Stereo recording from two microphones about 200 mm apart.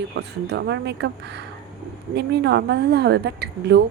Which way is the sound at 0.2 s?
60° right (ahead or behind).